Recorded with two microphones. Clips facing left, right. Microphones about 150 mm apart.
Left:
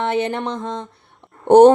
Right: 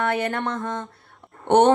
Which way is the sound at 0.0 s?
20° left (ahead or behind).